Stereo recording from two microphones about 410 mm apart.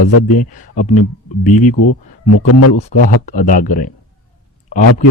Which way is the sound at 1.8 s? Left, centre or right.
Left.